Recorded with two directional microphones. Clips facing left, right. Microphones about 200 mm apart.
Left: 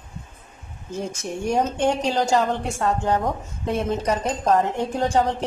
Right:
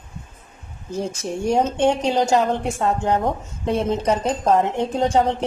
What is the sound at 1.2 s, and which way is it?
A woman's voice, 30° right (ahead or behind).